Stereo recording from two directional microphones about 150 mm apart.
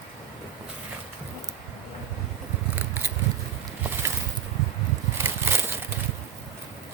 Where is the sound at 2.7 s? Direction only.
10° right (ahead or behind).